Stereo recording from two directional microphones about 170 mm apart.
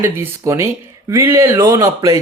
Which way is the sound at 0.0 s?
15° right (ahead or behind).